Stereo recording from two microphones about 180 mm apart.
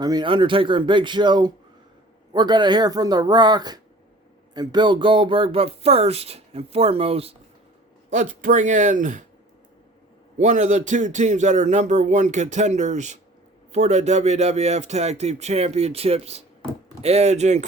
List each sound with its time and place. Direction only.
0.0 s a man's voice: 25° right (ahead or behind)
8.1 s speech: 45° right (ahead or behind)
10.3 s a man's voice: 40° right (ahead or behind)